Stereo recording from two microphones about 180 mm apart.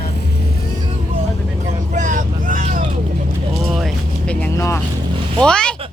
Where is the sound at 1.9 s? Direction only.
45° right (ahead or behind).